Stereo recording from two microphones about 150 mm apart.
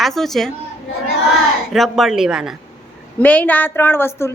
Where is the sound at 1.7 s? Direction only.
Centre (ahead or behind).